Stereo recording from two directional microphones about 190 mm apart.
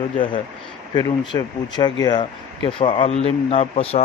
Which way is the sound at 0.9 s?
25° left (ahead or behind).